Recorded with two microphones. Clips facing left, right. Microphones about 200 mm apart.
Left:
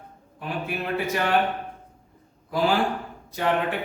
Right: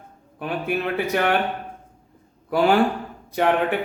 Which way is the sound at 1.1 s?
60° right (ahead or behind).